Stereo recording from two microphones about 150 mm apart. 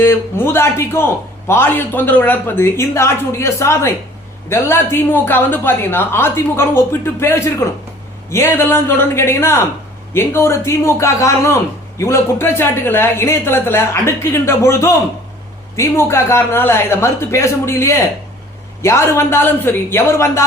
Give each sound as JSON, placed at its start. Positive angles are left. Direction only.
{"t": 0.0, "sound": "a man's voice", "side_deg": 15}